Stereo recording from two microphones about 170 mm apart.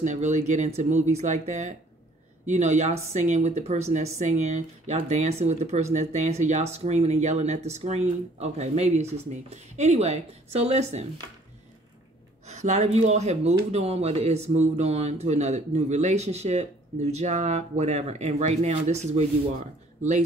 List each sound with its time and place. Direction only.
0.0 s speech: 45° right (ahead or behind)
12.4 s speech: 40° right (ahead or behind)